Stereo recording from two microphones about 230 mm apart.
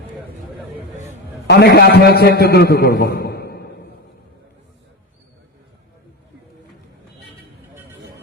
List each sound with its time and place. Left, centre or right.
1.5 s a man's voice: left